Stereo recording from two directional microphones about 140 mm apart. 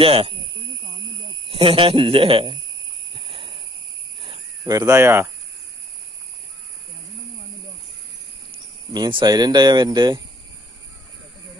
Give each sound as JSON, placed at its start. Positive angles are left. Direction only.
{"t": 0.0, "sound": "speech", "side_deg": -40}
{"t": 1.5, "sound": "speech", "side_deg": -40}
{"t": 3.2, "sound": "a sound", "side_deg": -35}
{"t": 4.2, "sound": "cricket", "side_deg": -35}
{"t": 4.7, "sound": "speech", "side_deg": -20}
{"t": 8.9, "sound": "speech", "side_deg": -30}